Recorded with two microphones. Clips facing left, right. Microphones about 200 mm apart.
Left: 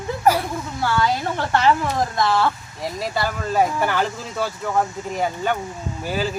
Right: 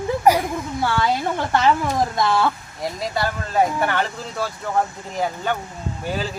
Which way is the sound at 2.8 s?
Centre (ahead or behind).